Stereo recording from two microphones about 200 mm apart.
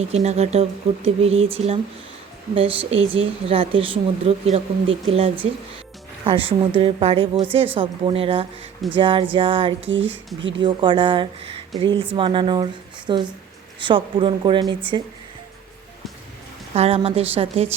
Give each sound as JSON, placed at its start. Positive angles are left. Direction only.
{"t": 0.0, "sound": "speech", "side_deg": -35}
{"t": 9.8, "sound": "speech", "side_deg": -70}
{"t": 10.6, "sound": "speech", "side_deg": -25}
{"t": 16.7, "sound": "speech", "side_deg": -30}